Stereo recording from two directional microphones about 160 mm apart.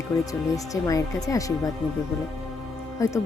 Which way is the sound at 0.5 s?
20° left (ahead or behind).